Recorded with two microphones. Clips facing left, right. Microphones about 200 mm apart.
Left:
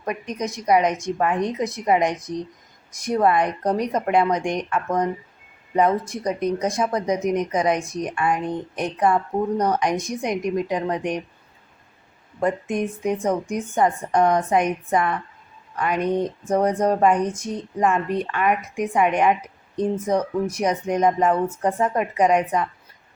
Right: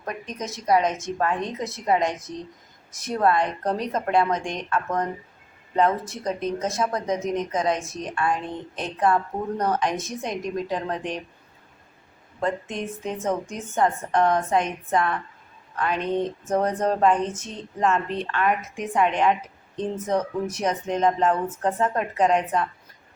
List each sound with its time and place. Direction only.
0.0 s a woman's voice: 15° left (ahead or behind)
12.4 s a woman's voice: 15° left (ahead or behind)